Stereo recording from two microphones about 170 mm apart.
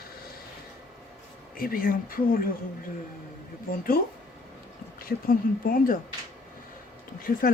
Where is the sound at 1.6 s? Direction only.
55° left (ahead or behind).